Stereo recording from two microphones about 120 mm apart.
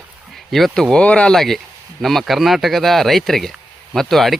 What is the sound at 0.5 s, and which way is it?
Speech, 5° left (ahead or behind).